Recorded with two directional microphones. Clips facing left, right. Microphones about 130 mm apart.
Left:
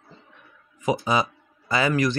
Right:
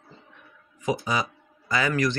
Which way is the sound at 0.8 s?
25° left (ahead or behind).